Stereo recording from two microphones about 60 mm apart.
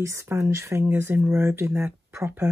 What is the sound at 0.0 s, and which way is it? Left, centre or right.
Speech, right.